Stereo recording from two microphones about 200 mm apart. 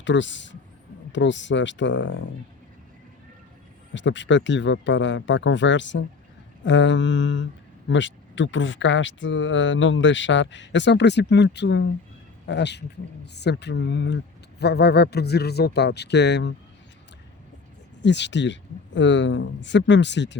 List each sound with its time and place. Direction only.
0.0 s speech: 65° left (ahead or behind)
3.9 s speech: 65° left (ahead or behind)
18.0 s speech: 60° left (ahead or behind)